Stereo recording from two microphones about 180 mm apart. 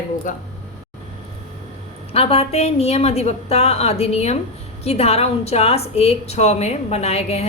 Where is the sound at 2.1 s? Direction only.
35° left (ahead or behind).